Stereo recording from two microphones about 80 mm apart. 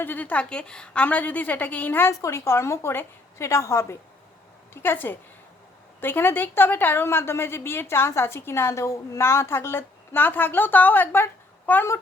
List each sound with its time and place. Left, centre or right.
0.0 s a woman's voice: left
2.2 s a woman's voice: left